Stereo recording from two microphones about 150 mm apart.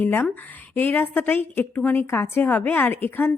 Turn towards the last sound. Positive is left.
turn(degrees=15)  # may be behind; listen again after turning